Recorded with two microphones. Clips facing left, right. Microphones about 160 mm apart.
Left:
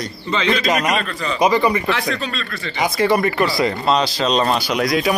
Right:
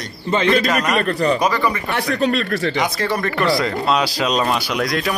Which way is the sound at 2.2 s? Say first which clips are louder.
Right 9 dB; 60° right (ahead or behind).